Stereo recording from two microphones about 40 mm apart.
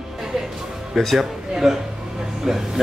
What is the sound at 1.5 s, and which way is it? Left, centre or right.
Speech, centre.